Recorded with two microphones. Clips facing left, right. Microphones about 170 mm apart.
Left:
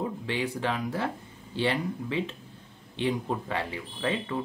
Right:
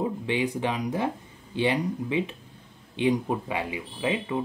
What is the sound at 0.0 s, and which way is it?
Speech, 15° right (ahead or behind).